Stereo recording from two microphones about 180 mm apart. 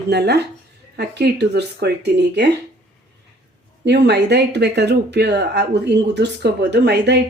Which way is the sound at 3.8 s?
70° right (ahead or behind).